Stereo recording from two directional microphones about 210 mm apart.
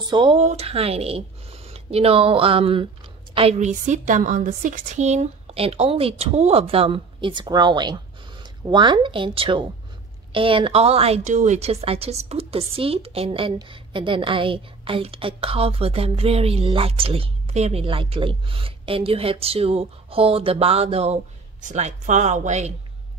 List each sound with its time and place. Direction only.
0.0 s a woman's voice: 20° right (ahead or behind)